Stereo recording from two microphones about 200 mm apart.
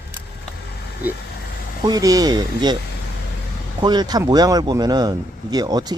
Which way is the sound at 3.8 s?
20° right (ahead or behind).